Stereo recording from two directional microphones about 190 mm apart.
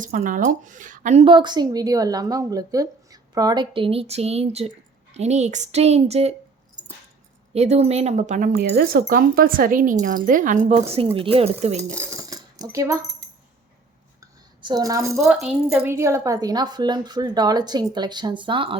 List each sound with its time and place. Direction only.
0.0 s a woman's voice: 45° right (ahead or behind)
7.5 s speech: 35° right (ahead or behind)
8.5 s speech: 55° right (ahead or behind); by 11.8 s 35° right (ahead or behind)
11.8 s cutlery: 15° right (ahead or behind)
12.7 s speech: 15° right (ahead or behind)
14.2 s cutlery: 20° right (ahead or behind)
15.9 s a woman's voice: 15° right (ahead or behind)